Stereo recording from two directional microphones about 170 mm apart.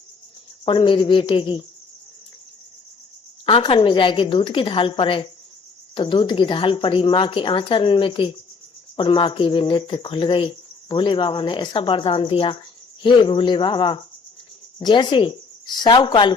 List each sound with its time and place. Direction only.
0.6 s speech: 30° left (ahead or behind)
3.4 s speech: 30° left (ahead or behind)